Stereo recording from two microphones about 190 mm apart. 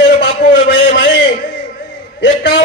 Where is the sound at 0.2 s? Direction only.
60° left (ahead or behind).